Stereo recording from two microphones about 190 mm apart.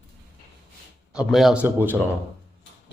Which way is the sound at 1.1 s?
5° right (ahead or behind).